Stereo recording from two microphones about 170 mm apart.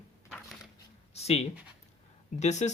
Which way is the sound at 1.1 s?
40° left (ahead or behind).